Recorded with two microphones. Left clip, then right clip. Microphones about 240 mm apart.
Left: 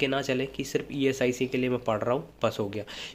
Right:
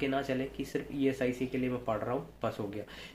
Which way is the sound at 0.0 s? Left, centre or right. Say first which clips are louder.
Left 5 dB; left.